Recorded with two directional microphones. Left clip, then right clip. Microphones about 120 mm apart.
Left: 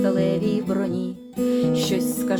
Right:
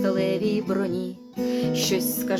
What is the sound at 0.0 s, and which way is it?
Music, 15° right (ahead or behind).